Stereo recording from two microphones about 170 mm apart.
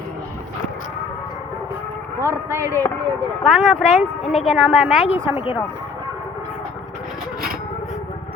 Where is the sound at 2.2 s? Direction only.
15° right (ahead or behind).